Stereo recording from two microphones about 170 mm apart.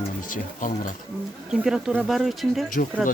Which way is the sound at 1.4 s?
5° right (ahead or behind).